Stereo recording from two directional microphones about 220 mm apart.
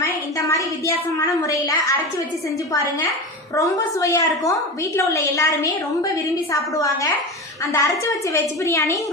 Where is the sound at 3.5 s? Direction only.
15° left (ahead or behind).